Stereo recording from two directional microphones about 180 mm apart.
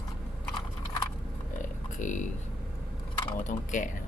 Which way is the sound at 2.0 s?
45° left (ahead or behind).